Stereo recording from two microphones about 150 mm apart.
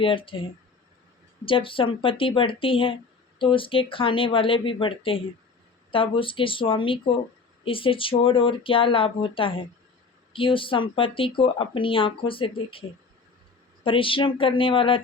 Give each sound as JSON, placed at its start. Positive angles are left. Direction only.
{"t": 0.0, "sound": "speech", "side_deg": 35}
{"t": 13.8, "sound": "speech", "side_deg": 35}